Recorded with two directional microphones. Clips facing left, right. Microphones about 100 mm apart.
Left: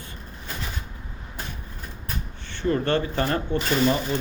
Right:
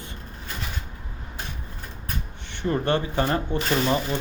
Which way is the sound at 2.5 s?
20° right (ahead or behind).